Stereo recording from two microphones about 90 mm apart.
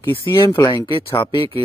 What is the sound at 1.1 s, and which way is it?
Speech, 65° left (ahead or behind).